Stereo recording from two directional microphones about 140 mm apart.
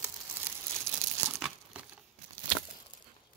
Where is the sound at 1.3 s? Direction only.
Centre (ahead or behind).